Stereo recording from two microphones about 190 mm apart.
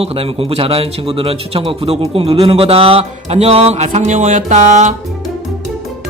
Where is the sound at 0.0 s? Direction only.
30° right (ahead or behind).